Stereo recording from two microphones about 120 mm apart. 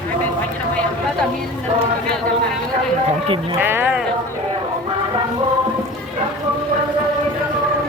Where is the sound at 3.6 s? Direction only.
15° right (ahead or behind).